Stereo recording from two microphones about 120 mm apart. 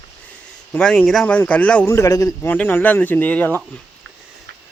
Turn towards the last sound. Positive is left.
turn(degrees=15)  # may be behind; listen again after turning